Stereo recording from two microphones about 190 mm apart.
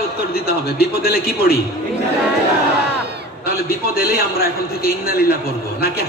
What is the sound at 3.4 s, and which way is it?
A man's voice, 55° left (ahead or behind).